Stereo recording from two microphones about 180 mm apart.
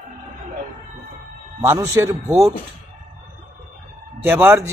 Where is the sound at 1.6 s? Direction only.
15° right (ahead or behind).